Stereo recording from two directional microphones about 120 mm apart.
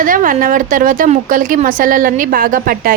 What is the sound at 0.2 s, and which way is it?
Speech, 90° right.